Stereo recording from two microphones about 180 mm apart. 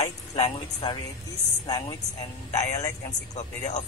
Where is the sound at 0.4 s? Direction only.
30° left (ahead or behind).